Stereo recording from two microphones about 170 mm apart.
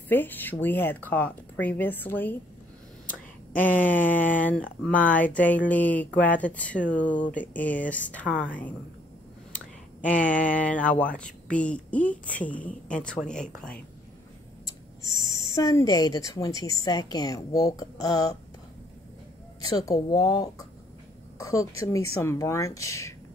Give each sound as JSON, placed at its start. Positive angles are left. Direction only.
{"t": 0.1, "sound": "speech", "side_deg": 10}
{"t": 3.5, "sound": "speech", "side_deg": 10}
{"t": 10.0, "sound": "a woman's voice", "side_deg": 5}
{"t": 15.0, "sound": "owl", "side_deg": -25}
{"t": 15.4, "sound": "speech", "side_deg": 20}
{"t": 19.7, "sound": "speech", "side_deg": 20}